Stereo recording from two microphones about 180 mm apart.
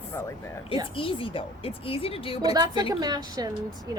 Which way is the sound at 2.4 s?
20° right (ahead or behind).